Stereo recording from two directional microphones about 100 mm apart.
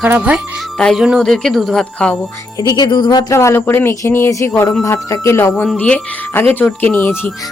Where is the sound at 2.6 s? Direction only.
45° left (ahead or behind).